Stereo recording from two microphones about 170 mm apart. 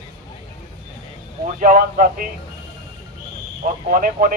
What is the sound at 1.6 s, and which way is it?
Speech, 50° right (ahead or behind).